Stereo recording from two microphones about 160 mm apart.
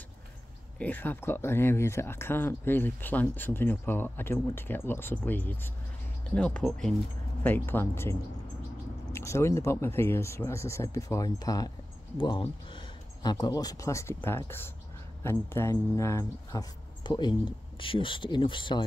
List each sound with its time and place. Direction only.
0.7 s speech: 10° left (ahead or behind); by 18.9 s 30° left (ahead or behind)